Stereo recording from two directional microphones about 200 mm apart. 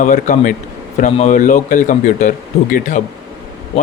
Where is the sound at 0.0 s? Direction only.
40° left (ahead or behind).